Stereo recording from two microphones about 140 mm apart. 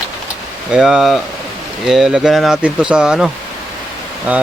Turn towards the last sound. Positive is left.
turn(degrees=-10)  # may be behind; listen again after turning